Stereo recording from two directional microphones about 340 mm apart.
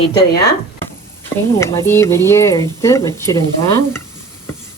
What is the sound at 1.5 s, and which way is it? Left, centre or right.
Speech, centre.